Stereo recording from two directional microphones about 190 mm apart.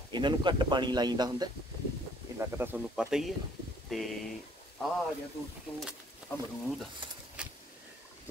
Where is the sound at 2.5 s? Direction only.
10° right (ahead or behind).